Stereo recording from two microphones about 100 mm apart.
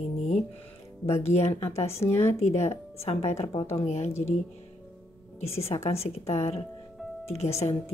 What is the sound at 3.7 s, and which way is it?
Speech, 90° left.